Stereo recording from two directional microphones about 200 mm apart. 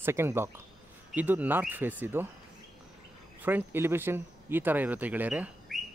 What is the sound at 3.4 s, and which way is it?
Speech, 10° right (ahead or behind).